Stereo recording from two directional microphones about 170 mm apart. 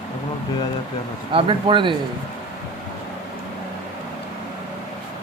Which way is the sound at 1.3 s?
30° right (ahead or behind).